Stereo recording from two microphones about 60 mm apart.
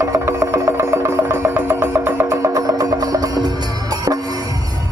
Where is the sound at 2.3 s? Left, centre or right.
Right.